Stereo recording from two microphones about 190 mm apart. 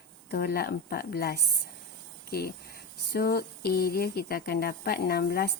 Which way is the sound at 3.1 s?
55° left (ahead or behind).